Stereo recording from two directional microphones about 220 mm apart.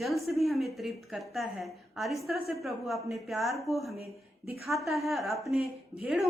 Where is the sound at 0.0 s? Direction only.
Centre (ahead or behind).